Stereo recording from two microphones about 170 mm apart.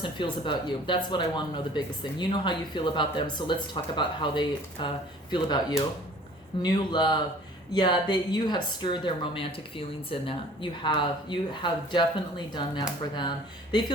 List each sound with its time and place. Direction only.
0.0 s speech: 30° left (ahead or behind)
13.1 s speech: 25° left (ahead or behind)